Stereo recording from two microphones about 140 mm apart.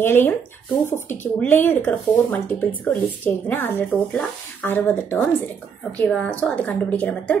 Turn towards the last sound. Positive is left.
turn(degrees=10)  # may be behind; listen again after turning